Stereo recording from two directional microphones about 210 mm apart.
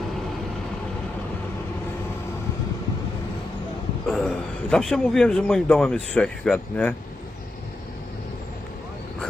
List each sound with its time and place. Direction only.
4.0 s a man's voice: centre (ahead or behind)